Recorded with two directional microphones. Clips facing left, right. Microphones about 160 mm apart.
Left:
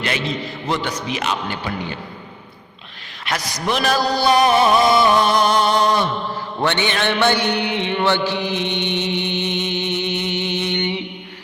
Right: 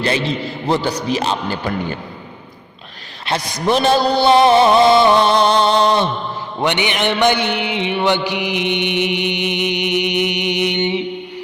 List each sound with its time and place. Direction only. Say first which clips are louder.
0.0 s a man's voice: right 4 dB; 30° right (ahead or behind)
3.2 s music: right 5 dB; 30° right (ahead or behind)
6.6 s mantra: right 2 dB; 15° right (ahead or behind)